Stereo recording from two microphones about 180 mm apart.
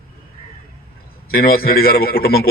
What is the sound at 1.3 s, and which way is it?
A man's voice, 55° left (ahead or behind).